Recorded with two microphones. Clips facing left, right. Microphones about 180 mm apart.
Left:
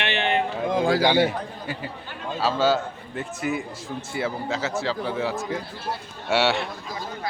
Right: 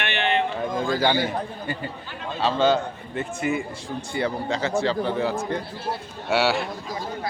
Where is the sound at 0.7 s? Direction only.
70° left (ahead or behind).